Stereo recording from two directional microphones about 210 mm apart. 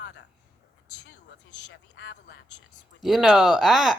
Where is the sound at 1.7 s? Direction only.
60° left (ahead or behind).